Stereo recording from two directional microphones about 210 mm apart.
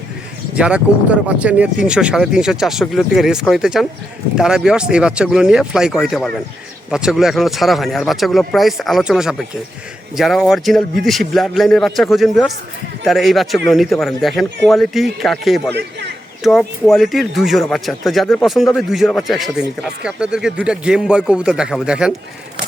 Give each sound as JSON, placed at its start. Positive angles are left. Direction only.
{"t": 0.5, "sound": "speech", "side_deg": -5}
{"t": 15.7, "sound": "a man's voice", "side_deg": -55}
{"t": 16.4, "sound": "speech", "side_deg": 0}